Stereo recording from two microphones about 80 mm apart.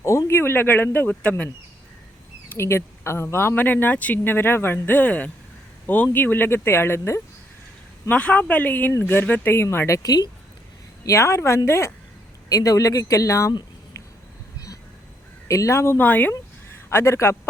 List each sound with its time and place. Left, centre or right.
0.0 s speech: left; by 1.5 s centre
2.5 s speech: left
8.1 s speech: centre; by 10.0 s left
10.0 s a woman's voice: left
11.0 s speech: left
12.5 s speech: left
15.4 s speech: left
16.0 s speech: left
16.9 s speech: left